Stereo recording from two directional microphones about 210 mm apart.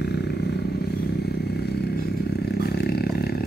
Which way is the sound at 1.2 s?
50° left (ahead or behind).